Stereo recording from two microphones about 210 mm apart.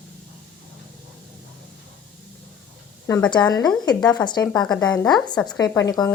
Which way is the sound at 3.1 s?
15° left (ahead or behind).